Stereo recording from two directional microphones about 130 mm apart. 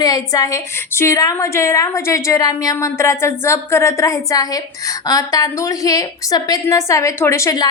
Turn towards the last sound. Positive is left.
turn(degrees=25)  # may be behind; listen again after turning